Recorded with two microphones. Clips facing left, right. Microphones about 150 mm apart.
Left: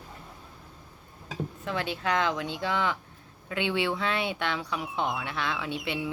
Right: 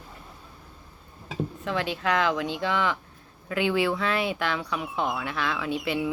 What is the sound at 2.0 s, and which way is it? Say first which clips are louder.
Speech: right 3 dB; 30° left (ahead or behind).